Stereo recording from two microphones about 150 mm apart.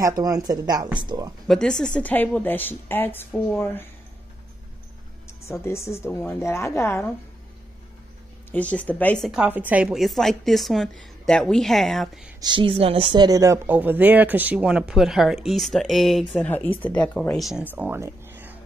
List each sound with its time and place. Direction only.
0.0 s speech: 25° right (ahead or behind)
1.5 s a woman's voice: 5° left (ahead or behind)
5.5 s a woman's voice: 20° left (ahead or behind)
8.5 s a woman's voice: 10° left (ahead or behind)
9.3 s a woman's voice: 10° right (ahead or behind)
12.4 s speech: 30° right (ahead or behind); by 16.3 s centre (ahead or behind)
16.3 s a woman's voice: 10° left (ahead or behind)
17.6 s a sound: 10° right (ahead or behind)